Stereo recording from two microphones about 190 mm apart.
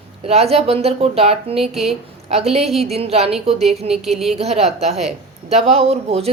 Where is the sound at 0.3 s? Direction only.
35° right (ahead or behind).